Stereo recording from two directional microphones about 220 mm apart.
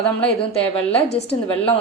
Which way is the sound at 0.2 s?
5° left (ahead or behind).